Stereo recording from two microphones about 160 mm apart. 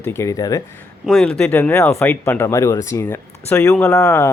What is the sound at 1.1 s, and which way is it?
Speech, 5° left (ahead or behind).